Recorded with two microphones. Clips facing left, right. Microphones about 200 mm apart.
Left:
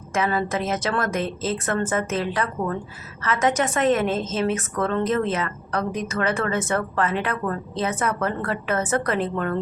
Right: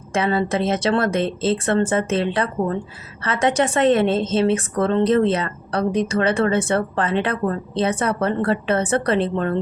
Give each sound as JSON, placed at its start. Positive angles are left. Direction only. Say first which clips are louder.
{"t": 0.1, "sound": "a woman's voice", "louder": "right 3 dB", "side_deg": -30}